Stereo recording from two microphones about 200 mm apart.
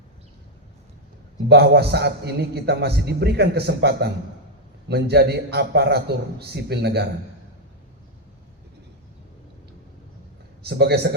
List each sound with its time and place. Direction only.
1.5 s a man's voice: 55° right (ahead or behind)
10.6 s speech: 55° right (ahead or behind)